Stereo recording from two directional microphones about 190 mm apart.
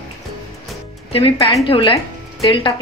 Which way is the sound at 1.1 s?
30° left (ahead or behind).